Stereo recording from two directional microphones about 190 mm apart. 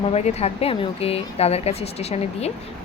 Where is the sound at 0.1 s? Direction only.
35° left (ahead or behind).